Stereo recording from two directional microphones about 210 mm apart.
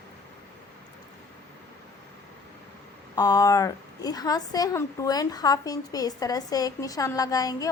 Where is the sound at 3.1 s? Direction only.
15° left (ahead or behind).